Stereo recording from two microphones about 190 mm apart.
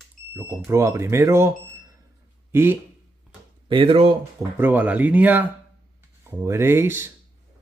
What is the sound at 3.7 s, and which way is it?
Speech, 30° right (ahead or behind).